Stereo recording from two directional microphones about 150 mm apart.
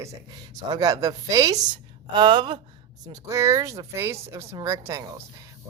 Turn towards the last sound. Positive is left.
turn(degrees=-20)  # may be behind; listen again after turning